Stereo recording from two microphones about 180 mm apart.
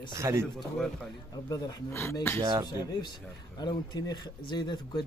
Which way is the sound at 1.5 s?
20° left (ahead or behind).